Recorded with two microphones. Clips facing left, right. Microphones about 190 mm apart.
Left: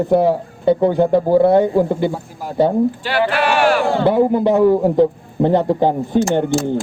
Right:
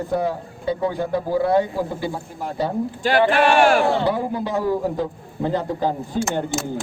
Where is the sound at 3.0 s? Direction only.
45° right (ahead or behind).